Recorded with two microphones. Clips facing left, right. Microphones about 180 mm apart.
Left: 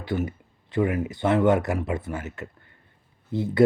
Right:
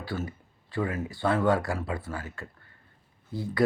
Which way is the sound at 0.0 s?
20° left (ahead or behind).